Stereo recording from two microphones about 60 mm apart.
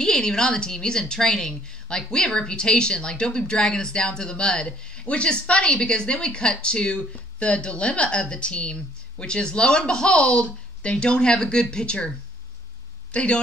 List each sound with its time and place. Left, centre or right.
0.0 s a woman's voice: centre
13.1 s speech: centre